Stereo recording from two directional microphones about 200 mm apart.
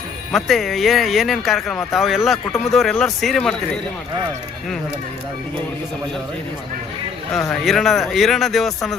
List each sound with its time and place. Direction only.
0.3 s speech: centre (ahead or behind)
7.6 s speech: centre (ahead or behind)